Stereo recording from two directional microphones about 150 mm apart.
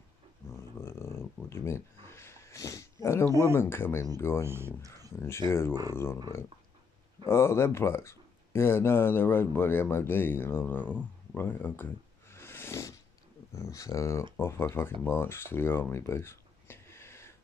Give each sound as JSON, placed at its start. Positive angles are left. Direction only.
{"t": 0.5, "sound": "a sound", "side_deg": 15}
{"t": 3.3, "sound": "speech", "side_deg": -20}
{"t": 3.5, "sound": "speech", "side_deg": 15}
{"t": 4.5, "sound": "speech", "side_deg": -15}
{"t": 5.1, "sound": "speech", "side_deg": 15}
{"t": 7.2, "sound": "speech", "side_deg": 15}